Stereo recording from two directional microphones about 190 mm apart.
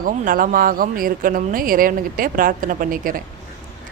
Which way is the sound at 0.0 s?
45° right (ahead or behind).